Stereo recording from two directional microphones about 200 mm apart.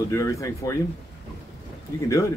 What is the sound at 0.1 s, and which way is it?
Speech, 15° left (ahead or behind).